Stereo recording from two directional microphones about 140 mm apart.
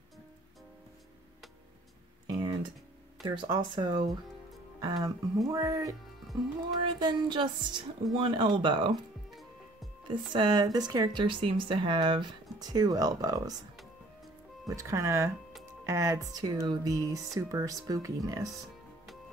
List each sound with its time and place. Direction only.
2.2 s a sound: 30° right (ahead or behind)
3.3 s speech: 35° right (ahead or behind)
6.8 s speech: 35° right (ahead or behind)
10.0 s speech: 35° right (ahead or behind)
14.7 s speech: 20° right (ahead or behind)